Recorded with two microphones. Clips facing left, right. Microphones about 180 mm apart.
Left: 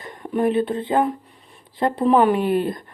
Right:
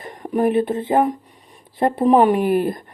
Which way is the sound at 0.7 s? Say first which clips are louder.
Right 2 dB; 25° right (ahead or behind).